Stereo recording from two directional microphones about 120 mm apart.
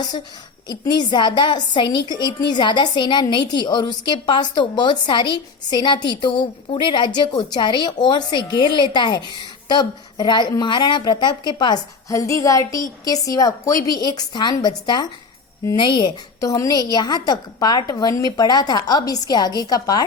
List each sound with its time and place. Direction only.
0.7 s a woman's voice: 35° left (ahead or behind)